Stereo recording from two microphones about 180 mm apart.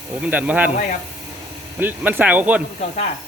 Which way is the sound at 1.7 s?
10° right (ahead or behind).